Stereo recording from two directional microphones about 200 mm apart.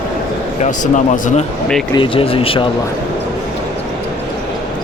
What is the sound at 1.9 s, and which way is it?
Speech, 25° left (ahead or behind).